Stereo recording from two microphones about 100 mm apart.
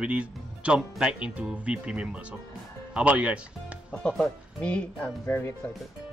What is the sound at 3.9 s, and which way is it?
Speech, 5° left (ahead or behind).